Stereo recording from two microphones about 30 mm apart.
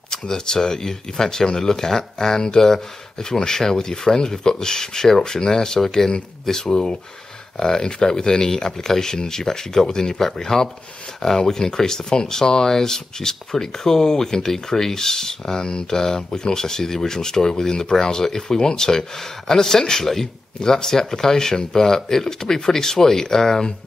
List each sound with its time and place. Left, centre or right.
0.1 s speech: left